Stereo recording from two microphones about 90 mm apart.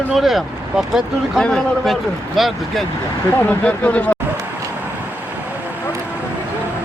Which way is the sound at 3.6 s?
15° left (ahead or behind).